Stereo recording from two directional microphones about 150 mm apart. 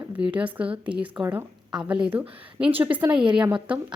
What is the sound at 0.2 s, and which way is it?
Speech, 10° right (ahead or behind).